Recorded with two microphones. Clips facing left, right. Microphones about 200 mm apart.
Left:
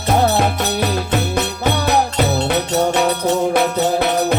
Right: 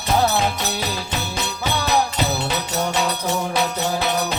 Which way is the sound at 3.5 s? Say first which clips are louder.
Left 6 dB; 55° left (ahead or behind).